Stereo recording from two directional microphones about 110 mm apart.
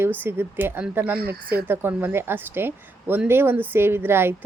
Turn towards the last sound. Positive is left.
turn(degrees=-20)  # may be behind; listen again after turning